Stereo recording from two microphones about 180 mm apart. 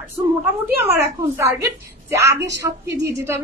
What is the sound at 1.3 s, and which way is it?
A woman's voice, 15° right (ahead or behind).